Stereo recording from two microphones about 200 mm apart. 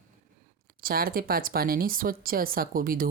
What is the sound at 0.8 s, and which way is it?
Speech, 50° right (ahead or behind).